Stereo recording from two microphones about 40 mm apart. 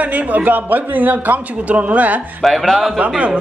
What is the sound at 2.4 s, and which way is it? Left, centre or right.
Speech, centre.